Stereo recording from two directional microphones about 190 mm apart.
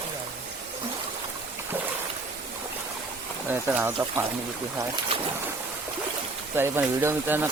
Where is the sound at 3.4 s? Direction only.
10° right (ahead or behind).